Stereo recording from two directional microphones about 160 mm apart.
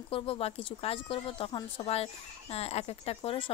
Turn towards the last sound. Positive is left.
turn(degrees=35)  # may be behind; listen again after turning